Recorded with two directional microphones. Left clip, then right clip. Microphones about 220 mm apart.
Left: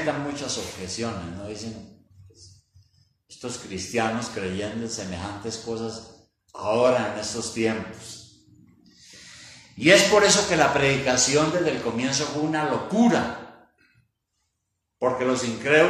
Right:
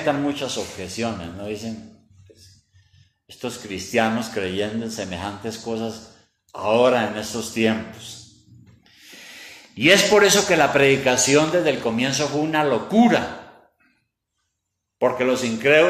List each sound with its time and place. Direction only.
0.3 s speech: 40° right (ahead or behind)
3.9 s a man's voice: 40° right (ahead or behind)
9.8 s a man's voice: 40° right (ahead or behind)
15.0 s speech: 45° right (ahead or behind)